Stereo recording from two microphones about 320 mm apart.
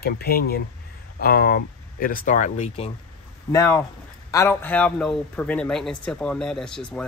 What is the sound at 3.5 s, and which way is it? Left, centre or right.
A man's voice, centre.